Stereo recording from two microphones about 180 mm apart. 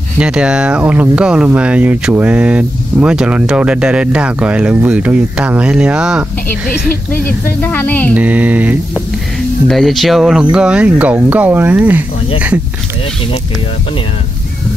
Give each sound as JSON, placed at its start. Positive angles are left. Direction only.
{"t": 0.2, "sound": "speech", "side_deg": -5}
{"t": 6.9, "sound": "speech", "side_deg": 55}
{"t": 7.6, "sound": "speech", "side_deg": 10}
{"t": 8.1, "sound": "speech", "side_deg": -10}